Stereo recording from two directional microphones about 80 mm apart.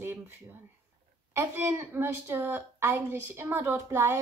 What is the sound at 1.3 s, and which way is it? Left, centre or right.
A woman's voice, right.